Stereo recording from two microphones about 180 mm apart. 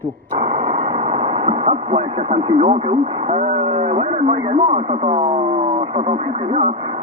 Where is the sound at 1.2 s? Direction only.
30° right (ahead or behind).